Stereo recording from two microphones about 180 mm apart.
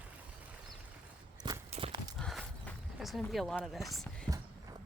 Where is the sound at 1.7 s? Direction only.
30° right (ahead or behind).